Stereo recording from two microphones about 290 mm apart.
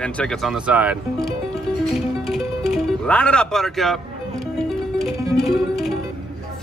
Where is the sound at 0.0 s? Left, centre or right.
Centre.